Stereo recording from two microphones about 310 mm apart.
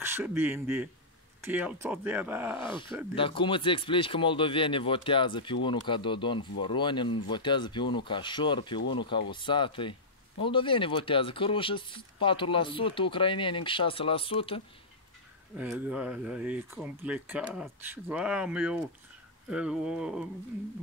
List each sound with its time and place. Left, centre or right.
0.0 s speech: centre
3.2 s speech: centre
15.5 s speech: centre